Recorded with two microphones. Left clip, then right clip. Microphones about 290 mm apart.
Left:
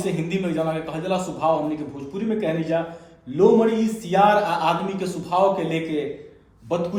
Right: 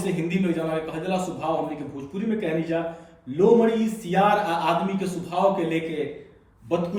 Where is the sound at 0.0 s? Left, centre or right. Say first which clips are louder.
Left 1 dB; centre.